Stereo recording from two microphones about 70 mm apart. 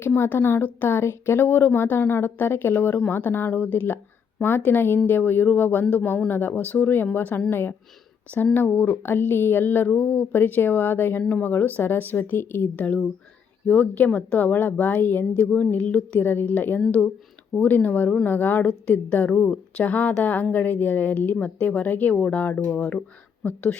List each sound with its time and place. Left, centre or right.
0.2 s speech: left
12.7 s speech: left